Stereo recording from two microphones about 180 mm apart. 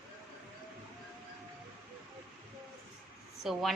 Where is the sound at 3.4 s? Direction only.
Centre (ahead or behind).